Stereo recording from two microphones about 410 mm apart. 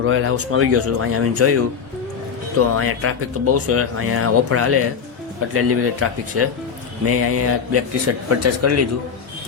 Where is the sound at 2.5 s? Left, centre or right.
Right.